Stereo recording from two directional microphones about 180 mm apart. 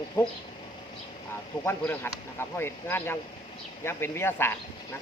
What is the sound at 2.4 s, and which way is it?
Speech, 15° left (ahead or behind).